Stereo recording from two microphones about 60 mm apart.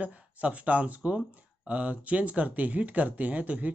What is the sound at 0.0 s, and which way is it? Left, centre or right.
Speech, right.